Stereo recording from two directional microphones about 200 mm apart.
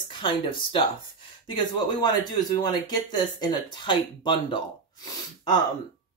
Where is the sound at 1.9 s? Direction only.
20° left (ahead or behind).